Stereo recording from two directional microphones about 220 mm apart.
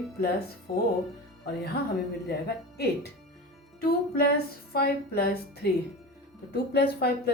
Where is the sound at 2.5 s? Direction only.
45° left (ahead or behind).